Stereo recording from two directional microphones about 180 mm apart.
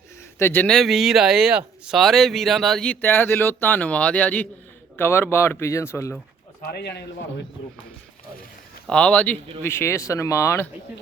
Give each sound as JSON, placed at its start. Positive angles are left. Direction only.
{"t": 0.3, "sound": "speech", "side_deg": 10}
{"t": 6.7, "sound": "a man's voice", "side_deg": 65}
{"t": 8.9, "sound": "speech", "side_deg": 5}